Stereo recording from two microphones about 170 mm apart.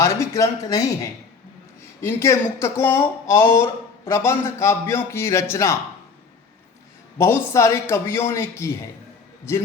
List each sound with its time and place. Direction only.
0.0 s speech: 20° left (ahead or behind)
7.2 s speech: 15° left (ahead or behind)